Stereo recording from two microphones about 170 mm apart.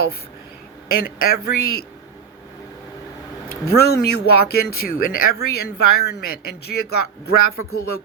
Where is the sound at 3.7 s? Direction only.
65° left (ahead or behind).